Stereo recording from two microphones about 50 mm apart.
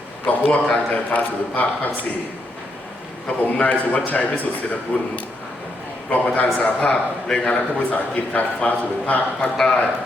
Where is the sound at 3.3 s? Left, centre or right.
Left.